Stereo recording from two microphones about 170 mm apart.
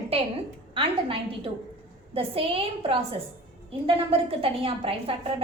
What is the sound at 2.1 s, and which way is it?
A woman's voice, 35° right (ahead or behind).